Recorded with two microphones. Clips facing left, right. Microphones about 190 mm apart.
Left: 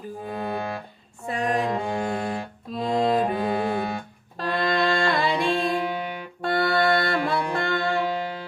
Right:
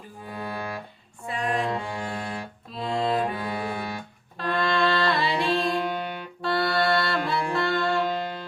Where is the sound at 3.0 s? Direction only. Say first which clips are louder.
Left 3 dB; 40° left (ahead or behind).